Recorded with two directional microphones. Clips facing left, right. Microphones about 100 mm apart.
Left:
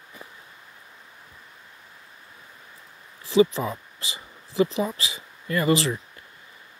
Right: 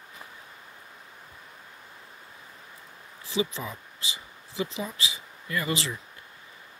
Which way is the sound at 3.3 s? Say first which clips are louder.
Left 10 dB; 40° left (ahead or behind).